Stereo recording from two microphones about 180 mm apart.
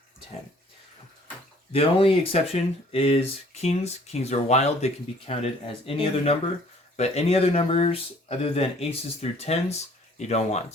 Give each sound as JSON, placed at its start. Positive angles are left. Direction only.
{"t": 1.7, "sound": "speech", "side_deg": 30}